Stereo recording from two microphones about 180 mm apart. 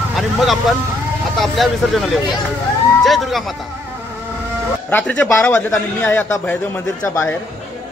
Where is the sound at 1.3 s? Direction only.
Centre (ahead or behind).